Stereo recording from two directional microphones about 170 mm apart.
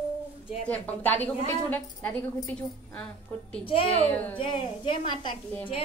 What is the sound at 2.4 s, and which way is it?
A woman's voice, 5° left (ahead or behind).